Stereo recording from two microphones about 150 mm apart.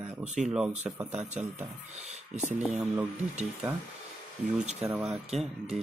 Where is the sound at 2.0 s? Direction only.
50° right (ahead or behind).